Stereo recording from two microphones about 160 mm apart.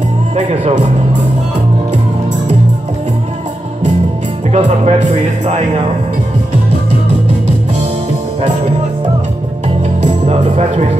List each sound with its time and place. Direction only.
0.4 s speech: 40° right (ahead or behind)
4.5 s speech: 45° right (ahead or behind)
10.0 s music: 40° right (ahead or behind)